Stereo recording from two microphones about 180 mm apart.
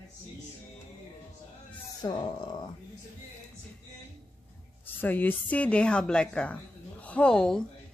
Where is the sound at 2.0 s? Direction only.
25° left (ahead or behind).